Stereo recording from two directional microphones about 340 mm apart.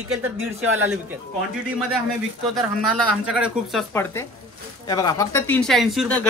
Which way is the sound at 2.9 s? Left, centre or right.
Centre.